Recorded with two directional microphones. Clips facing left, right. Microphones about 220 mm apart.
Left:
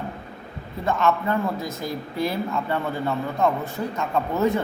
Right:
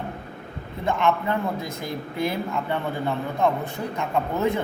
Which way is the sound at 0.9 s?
15° right (ahead or behind).